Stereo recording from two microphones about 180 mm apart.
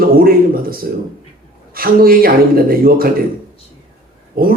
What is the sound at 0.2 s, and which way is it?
Speech, 55° right (ahead or behind).